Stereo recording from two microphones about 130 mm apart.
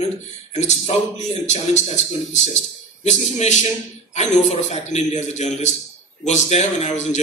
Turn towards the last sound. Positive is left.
turn(degrees=60)  # may be behind; listen again after turning